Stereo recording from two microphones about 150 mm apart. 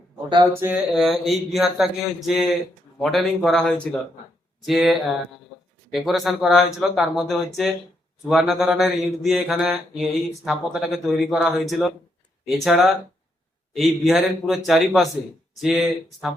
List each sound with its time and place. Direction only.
0.5 s speech: 15° right (ahead or behind)
1.0 s mantra: centre (ahead or behind)